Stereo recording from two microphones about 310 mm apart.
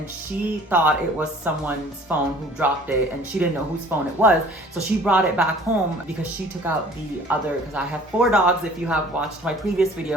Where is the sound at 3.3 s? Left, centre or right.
Centre.